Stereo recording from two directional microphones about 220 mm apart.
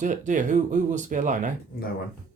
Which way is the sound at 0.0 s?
35° right (ahead or behind).